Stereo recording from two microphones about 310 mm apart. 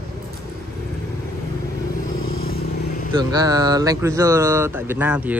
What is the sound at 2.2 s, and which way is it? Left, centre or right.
Vehicle, left.